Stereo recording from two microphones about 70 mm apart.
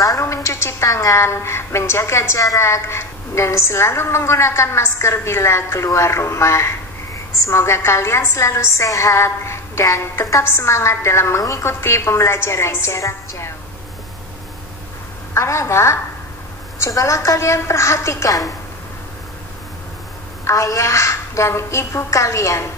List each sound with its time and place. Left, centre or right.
0.2 s a woman's voice: left
15.3 s a woman's voice: left
20.4 s a woman's voice: left